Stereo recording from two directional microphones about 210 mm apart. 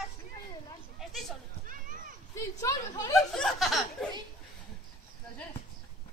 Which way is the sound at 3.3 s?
5° left (ahead or behind).